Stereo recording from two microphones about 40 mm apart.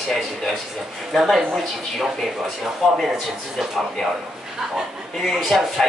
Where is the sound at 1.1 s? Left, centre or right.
Centre.